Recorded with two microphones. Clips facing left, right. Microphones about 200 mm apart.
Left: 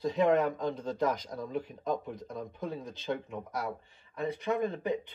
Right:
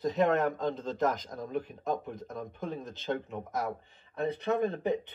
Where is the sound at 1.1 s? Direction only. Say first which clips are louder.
Right 1 dB; 50° right (ahead or behind).